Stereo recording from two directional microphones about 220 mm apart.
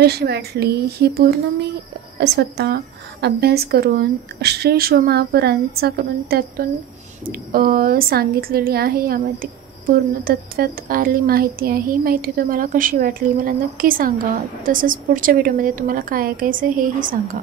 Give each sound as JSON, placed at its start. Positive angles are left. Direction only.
{"t": 0.0, "sound": "a woman's voice", "side_deg": -45}